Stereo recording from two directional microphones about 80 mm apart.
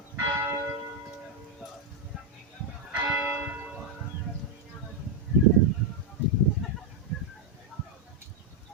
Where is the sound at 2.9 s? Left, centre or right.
Centre.